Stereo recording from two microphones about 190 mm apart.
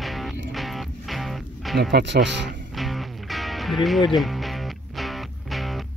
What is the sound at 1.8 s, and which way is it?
Speech, 60° right (ahead or behind).